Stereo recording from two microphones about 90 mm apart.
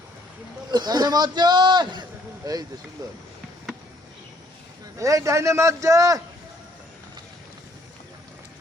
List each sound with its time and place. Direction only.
0.7 s a man's voice: 50° right (ahead or behind)
4.9 s a man's voice: 35° right (ahead or behind)